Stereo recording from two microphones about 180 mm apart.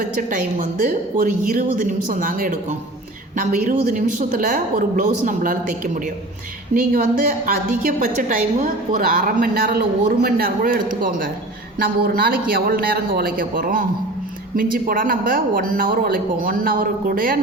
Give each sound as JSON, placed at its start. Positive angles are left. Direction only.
{"t": 0.2, "sound": "a woman's voice", "side_deg": -50}